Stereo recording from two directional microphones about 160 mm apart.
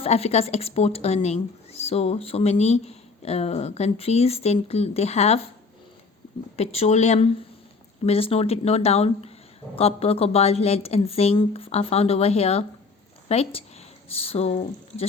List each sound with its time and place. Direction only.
0.0 s speech: 40° left (ahead or behind)
6.6 s speech: 40° left (ahead or behind)